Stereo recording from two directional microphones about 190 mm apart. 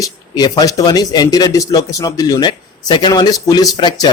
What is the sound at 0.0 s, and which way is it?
Speech, 20° left (ahead or behind).